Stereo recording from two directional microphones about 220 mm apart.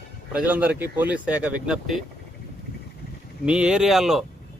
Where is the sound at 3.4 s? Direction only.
5° right (ahead or behind).